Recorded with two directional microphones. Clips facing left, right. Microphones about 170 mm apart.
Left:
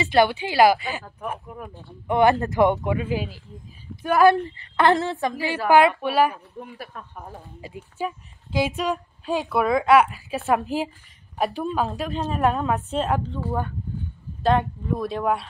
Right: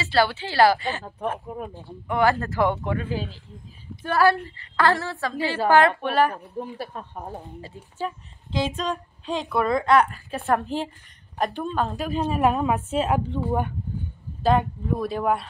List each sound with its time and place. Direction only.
0.0 s a woman's voice: 20° left (ahead or behind)
1.5 s speech: 25° right (ahead or behind)
2.0 s a woman's voice: 20° left (ahead or behind)
6.6 s speech: 30° right (ahead or behind)
7.6 s a woman's voice: 10° left (ahead or behind); by 13.2 s 10° right (ahead or behind)
13.3 s speech: 20° right (ahead or behind)
14.4 s a woman's voice: centre (ahead or behind)